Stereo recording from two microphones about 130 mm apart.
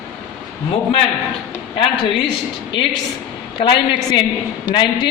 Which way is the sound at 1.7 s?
40° left (ahead or behind).